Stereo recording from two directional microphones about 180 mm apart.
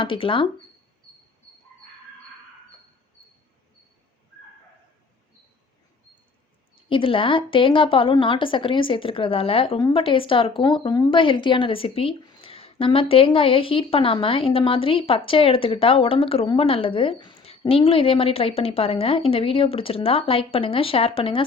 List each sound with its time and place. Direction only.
0.0 s a woman's voice: 30° left (ahead or behind)
6.8 s a woman's voice: 30° left (ahead or behind)